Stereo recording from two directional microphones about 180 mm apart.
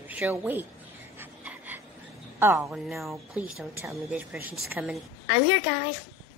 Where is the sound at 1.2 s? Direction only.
10° right (ahead or behind).